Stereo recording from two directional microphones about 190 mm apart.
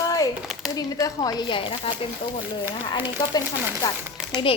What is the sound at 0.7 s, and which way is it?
Speech, 20° left (ahead or behind).